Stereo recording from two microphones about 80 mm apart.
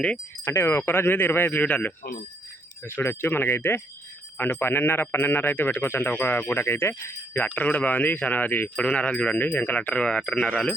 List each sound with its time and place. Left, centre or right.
0.4 s a man's voice: left
2.8 s a man's voice: left
7.4 s speech: centre